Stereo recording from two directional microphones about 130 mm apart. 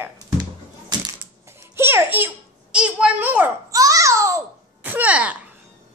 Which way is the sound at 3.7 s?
25° right (ahead or behind).